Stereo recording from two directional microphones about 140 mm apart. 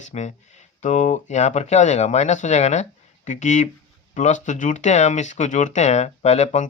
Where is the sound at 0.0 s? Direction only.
55° left (ahead or behind).